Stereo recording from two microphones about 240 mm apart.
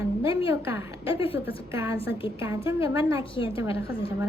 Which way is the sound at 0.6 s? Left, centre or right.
Centre.